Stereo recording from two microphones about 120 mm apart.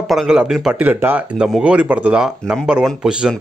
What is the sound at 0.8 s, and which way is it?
Speech, 15° right (ahead or behind).